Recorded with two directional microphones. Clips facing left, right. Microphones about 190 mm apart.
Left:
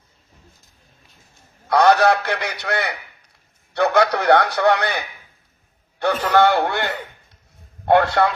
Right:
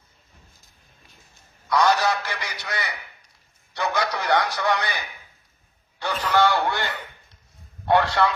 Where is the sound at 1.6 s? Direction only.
60° left (ahead or behind).